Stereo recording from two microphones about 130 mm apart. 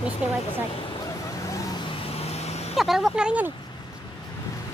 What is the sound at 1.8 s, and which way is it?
Vehicle, 50° left (ahead or behind).